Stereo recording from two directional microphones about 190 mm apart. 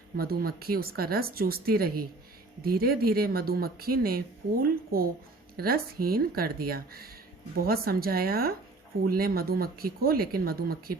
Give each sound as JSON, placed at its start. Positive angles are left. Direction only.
{"t": 0.2, "sound": "speech", "side_deg": -55}